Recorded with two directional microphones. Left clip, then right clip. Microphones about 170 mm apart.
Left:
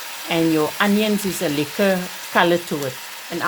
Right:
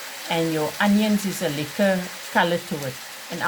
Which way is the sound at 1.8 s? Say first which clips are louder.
Left 1 dB; 30° left (ahead or behind).